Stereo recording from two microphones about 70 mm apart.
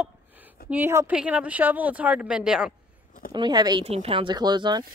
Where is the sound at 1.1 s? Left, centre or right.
Centre.